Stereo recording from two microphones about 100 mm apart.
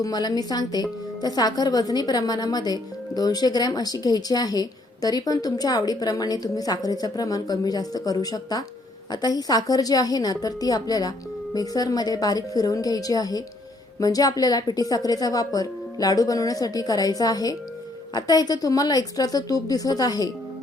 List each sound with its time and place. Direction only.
0.0 s speech: 40° left (ahead or behind)